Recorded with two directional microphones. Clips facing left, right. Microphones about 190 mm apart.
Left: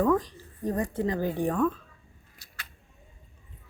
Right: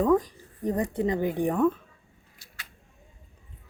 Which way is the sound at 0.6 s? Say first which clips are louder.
Right 2 dB; 15° right (ahead or behind).